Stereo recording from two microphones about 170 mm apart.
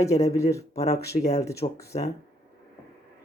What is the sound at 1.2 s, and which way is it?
Speech, 40° left (ahead or behind).